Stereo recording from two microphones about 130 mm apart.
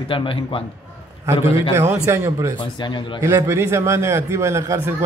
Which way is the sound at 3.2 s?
20° right (ahead or behind).